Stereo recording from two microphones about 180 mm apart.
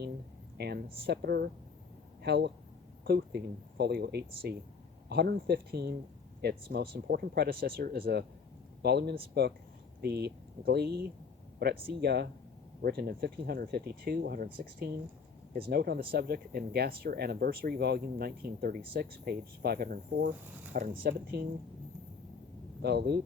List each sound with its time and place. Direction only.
0.5 s speech: 65° right (ahead or behind)
15.7 s speech: 60° right (ahead or behind)
22.8 s speech: 65° right (ahead or behind)